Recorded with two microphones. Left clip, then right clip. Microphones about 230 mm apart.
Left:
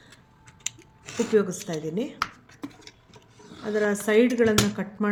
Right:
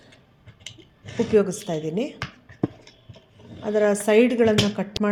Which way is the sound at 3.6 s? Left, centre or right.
Centre.